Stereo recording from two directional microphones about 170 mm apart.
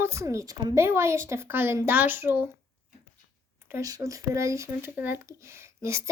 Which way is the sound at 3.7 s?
20° right (ahead or behind).